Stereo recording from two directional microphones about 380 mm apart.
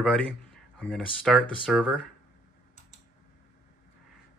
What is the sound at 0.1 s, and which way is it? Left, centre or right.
Speech, centre.